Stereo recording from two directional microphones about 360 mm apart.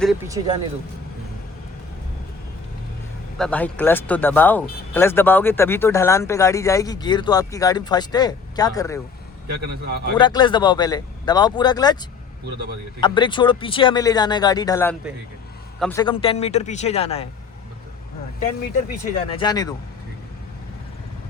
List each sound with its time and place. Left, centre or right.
0.0 s speech: centre
3.3 s speech: centre
10.2 s speech: centre
13.0 s speech: centre
18.9 s speech: centre